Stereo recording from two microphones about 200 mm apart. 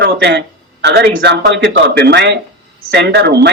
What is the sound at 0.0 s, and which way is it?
Speech, 55° right (ahead or behind).